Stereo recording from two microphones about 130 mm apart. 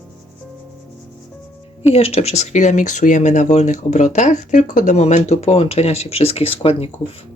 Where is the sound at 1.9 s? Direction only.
50° left (ahead or behind).